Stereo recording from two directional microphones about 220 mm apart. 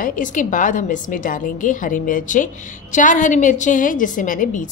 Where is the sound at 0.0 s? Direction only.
35° left (ahead or behind).